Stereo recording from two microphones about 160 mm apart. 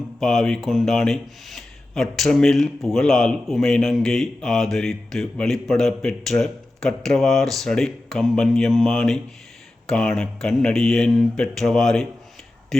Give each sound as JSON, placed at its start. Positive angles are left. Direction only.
{"t": 0.2, "sound": "speech", "side_deg": 0}